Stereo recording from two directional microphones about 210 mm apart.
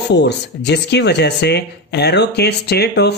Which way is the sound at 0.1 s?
55° left (ahead or behind).